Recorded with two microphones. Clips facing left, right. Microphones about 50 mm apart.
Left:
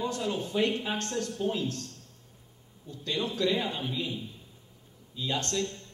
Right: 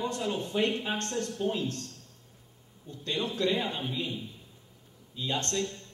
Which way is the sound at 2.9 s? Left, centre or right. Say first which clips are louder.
Even; right.